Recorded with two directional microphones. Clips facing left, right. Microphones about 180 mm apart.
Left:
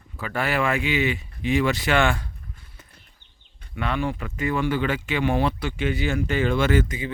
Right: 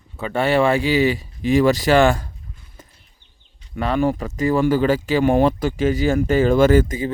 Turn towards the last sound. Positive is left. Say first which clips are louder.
# right 7 dB
turn(degrees=-40)  # may be behind; listen again after turning